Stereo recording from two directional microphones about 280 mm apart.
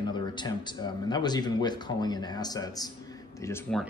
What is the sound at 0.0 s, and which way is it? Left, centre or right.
Speech, centre.